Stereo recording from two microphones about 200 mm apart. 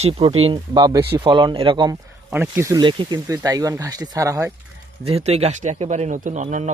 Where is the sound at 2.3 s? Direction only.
10° right (ahead or behind).